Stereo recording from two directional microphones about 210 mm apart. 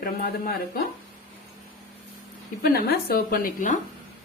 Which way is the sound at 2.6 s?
45° left (ahead or behind).